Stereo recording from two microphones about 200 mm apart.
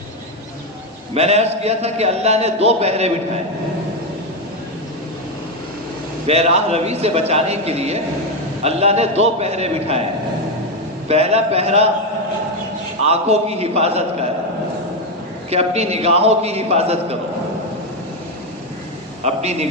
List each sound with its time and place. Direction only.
1.1 s a man's voice: 30° right (ahead or behind)
6.2 s a man's voice: 30° right (ahead or behind)
11.1 s a man's voice: 30° right (ahead or behind)
13.1 s a man's voice: 30° right (ahead or behind)
15.4 s a man's voice: 30° right (ahead or behind)
19.2 s a man's voice: 35° right (ahead or behind)